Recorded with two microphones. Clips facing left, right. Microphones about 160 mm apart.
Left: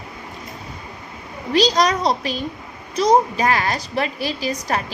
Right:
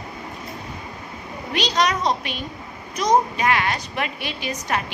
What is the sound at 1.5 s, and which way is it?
A woman's voice, 35° left (ahead or behind).